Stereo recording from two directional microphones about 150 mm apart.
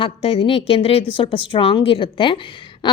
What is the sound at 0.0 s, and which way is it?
A woman's voice, 40° left (ahead or behind).